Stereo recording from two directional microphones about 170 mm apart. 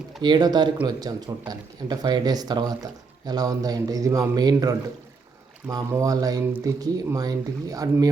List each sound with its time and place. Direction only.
0.2 s speech: 25° right (ahead or behind)